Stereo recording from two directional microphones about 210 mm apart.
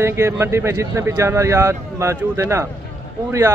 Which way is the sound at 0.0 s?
10° right (ahead or behind).